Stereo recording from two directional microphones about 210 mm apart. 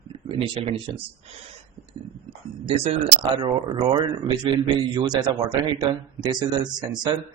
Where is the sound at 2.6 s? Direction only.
25° right (ahead or behind).